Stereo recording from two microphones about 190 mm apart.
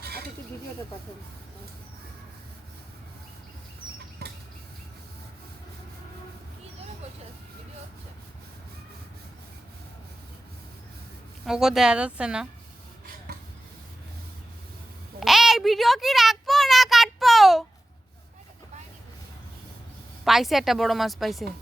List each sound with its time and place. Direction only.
4.2 s a sound: 55° right (ahead or behind)
11.4 s a woman's voice: centre (ahead or behind)
15.2 s child singing: centre (ahead or behind)
20.2 s a woman's voice: centre (ahead or behind)